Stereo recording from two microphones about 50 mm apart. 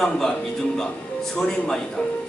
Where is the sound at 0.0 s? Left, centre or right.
Centre.